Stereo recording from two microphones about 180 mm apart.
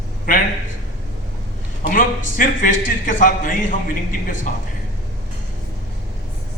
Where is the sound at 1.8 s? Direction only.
50° left (ahead or behind).